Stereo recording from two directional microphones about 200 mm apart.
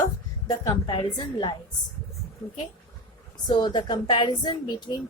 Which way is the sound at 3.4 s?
20° left (ahead or behind).